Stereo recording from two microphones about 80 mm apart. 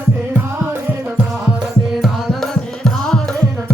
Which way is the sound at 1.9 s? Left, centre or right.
Centre.